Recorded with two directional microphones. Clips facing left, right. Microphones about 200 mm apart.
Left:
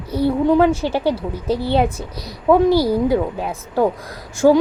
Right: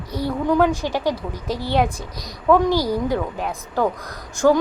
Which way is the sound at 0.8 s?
15° right (ahead or behind).